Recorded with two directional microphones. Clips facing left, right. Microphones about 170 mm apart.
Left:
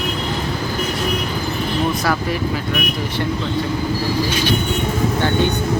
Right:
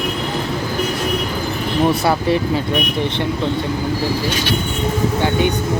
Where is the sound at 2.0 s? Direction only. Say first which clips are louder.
Right 4 dB; 25° right (ahead or behind).